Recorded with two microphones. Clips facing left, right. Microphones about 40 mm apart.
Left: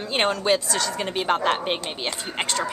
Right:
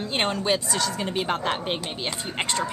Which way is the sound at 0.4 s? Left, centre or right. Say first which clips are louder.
Left 2 dB; centre.